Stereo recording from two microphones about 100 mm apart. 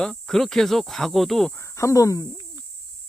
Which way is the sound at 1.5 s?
30° left (ahead or behind).